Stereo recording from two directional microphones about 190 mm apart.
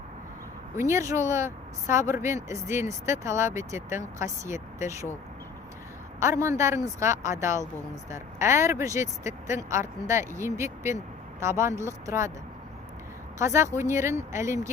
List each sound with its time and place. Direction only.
0.8 s speech: 15° right (ahead or behind)
6.1 s speech: 15° right (ahead or behind)
13.4 s speech: 15° right (ahead or behind)